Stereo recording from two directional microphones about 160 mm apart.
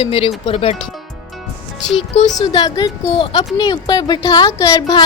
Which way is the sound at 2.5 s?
25° left (ahead or behind).